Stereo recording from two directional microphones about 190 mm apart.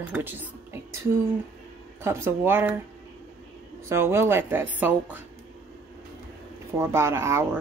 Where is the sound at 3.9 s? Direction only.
15° right (ahead or behind).